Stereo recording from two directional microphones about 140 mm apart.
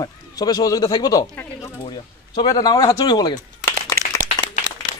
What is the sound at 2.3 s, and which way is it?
Speech, 30° left (ahead or behind).